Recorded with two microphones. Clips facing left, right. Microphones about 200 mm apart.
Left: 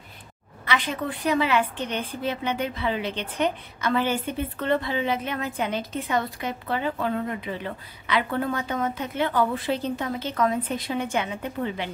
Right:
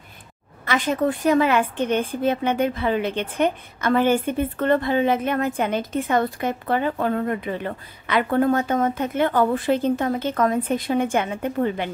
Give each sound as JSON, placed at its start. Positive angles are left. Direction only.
{"t": 0.7, "sound": "a woman's voice", "side_deg": -45}